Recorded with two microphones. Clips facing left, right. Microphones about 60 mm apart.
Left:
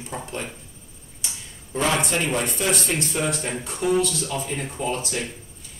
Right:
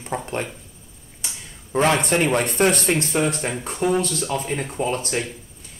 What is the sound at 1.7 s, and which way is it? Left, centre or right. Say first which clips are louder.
Speech: right 4 dB; right.